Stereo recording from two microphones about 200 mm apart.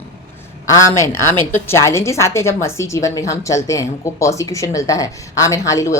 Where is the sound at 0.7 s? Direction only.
15° left (ahead or behind).